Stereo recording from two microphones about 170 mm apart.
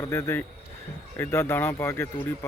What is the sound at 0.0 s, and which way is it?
Speech, 15° left (ahead or behind).